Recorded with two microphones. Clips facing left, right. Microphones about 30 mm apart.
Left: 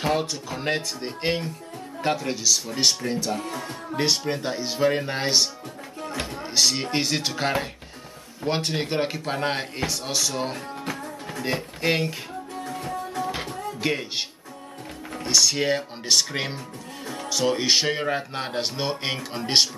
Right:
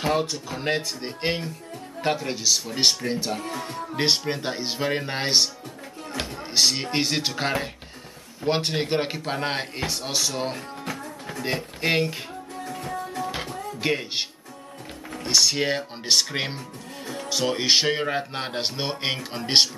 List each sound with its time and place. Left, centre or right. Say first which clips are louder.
0.0 s speech: even; centre
12.6 s music: even; centre
13.2 s a sound: left 2 dB; centre
13.7 s speech: right 1 dB; centre
15.2 s speech: even; centre